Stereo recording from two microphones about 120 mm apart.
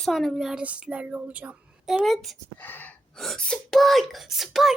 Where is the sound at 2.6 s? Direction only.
15° left (ahead or behind).